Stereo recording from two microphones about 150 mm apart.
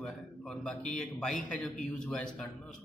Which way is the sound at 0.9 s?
5° left (ahead or behind).